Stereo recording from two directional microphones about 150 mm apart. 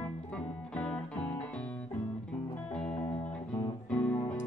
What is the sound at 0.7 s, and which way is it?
Music, 10° left (ahead or behind).